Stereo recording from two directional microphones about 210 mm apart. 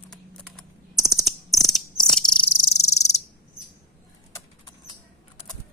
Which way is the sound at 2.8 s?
30° left (ahead or behind).